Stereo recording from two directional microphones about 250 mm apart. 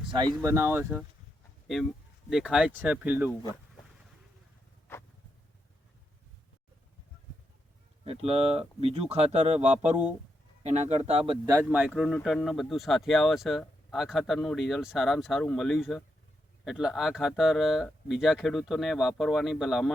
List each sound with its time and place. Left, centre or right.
0.1 s speech: centre
8.0 s speech: right; by 19.9 s centre